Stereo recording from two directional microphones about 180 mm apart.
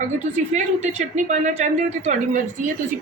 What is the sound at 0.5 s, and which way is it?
Speech, 40° right (ahead or behind).